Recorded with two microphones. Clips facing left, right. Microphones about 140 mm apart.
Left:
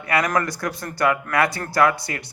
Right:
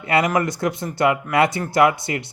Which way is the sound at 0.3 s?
20° right (ahead or behind).